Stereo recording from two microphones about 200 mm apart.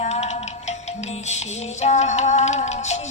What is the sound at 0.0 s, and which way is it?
Music, 35° left (ahead or behind).